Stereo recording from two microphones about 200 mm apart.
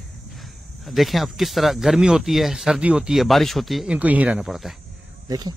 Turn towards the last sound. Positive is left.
turn(degrees=-20)  # may be behind; listen again after turning